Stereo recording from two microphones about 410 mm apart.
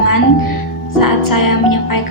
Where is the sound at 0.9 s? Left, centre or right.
Left.